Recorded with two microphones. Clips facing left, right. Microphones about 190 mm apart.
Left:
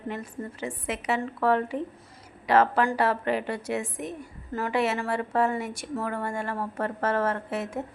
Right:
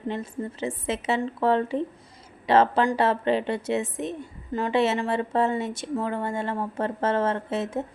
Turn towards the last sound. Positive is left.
turn(degrees=-25)  # may be behind; listen again after turning